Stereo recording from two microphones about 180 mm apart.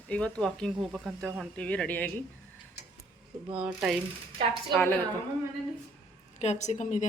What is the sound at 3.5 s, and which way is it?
Speech, 5° right (ahead or behind).